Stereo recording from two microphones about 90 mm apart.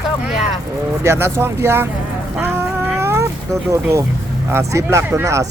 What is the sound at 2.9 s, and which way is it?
Cat, 30° right (ahead or behind).